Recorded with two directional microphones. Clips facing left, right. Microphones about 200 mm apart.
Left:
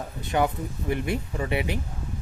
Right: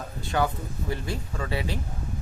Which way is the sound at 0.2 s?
20° left (ahead or behind).